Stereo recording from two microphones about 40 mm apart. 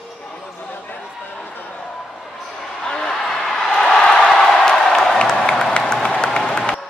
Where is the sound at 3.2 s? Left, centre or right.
Centre.